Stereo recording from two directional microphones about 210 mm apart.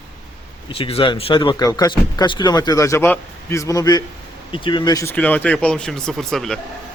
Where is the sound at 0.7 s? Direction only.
25° left (ahead or behind); by 6.6 s centre (ahead or behind).